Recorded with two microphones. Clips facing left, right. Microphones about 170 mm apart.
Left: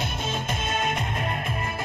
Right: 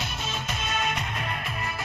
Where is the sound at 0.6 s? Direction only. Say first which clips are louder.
Left 1 dB; 50° left (ahead or behind).